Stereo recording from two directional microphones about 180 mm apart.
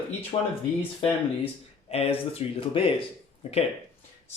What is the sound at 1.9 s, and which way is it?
Speech, 35° left (ahead or behind).